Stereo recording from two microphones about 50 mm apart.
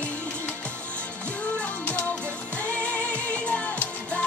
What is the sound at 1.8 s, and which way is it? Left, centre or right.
Music, left.